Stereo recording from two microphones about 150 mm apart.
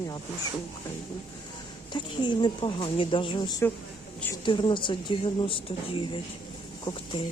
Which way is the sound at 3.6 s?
15° left (ahead or behind).